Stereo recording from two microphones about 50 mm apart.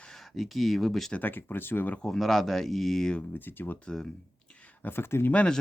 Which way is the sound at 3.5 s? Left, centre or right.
Left.